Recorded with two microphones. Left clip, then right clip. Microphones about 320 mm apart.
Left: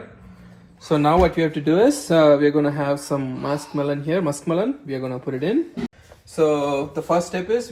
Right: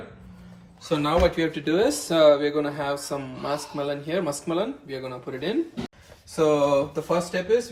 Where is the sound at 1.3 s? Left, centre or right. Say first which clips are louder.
Left 5 dB; centre.